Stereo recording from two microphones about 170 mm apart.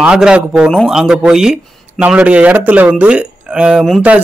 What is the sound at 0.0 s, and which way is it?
Speech, 5° right (ahead or behind).